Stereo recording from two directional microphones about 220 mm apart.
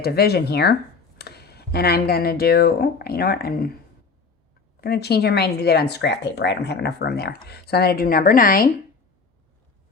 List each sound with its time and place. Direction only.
0.0 s speech: 45° left (ahead or behind)
4.8 s speech: 45° left (ahead or behind)